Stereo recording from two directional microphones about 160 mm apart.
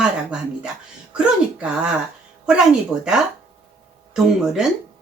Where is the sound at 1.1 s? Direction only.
5° right (ahead or behind).